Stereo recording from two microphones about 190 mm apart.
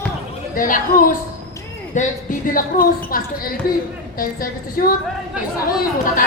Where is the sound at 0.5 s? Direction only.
45° left (ahead or behind).